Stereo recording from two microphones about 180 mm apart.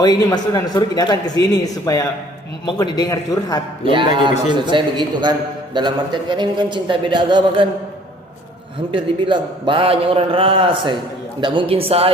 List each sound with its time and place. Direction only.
0.0 s a man's voice: 20° left (ahead or behind)
3.8 s a man's voice: 25° right (ahead or behind)
8.9 s a man's voice: 25° right (ahead or behind)